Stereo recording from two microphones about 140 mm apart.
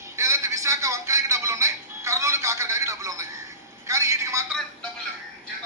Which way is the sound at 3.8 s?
20° right (ahead or behind).